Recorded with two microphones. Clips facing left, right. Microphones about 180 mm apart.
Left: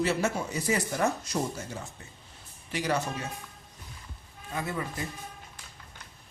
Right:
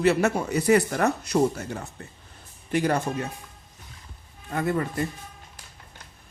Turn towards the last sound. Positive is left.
turn(degrees=-55)  # may be behind; listen again after turning